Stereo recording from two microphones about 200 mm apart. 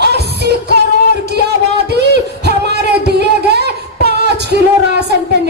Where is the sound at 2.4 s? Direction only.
55° right (ahead or behind).